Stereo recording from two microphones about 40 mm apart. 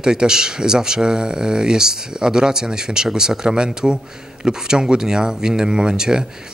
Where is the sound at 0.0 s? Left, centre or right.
Centre.